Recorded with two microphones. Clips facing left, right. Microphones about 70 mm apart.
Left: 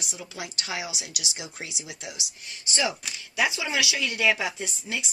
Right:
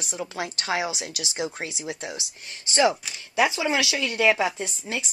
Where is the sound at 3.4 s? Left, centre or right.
Right.